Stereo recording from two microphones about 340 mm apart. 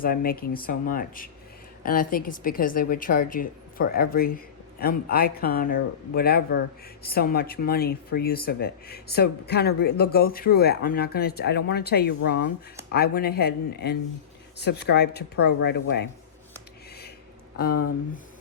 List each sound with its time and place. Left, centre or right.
0.0 s speech: left